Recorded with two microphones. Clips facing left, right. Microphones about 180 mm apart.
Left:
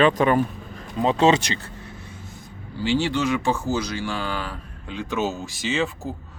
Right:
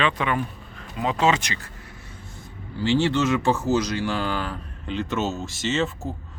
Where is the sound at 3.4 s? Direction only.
10° left (ahead or behind).